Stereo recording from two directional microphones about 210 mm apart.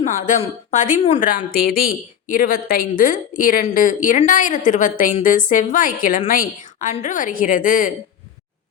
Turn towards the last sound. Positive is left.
turn(degrees=40)  # may be behind; listen again after turning